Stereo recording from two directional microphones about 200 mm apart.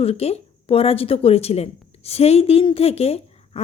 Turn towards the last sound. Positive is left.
turn(degrees=30)  # may be behind; listen again after turning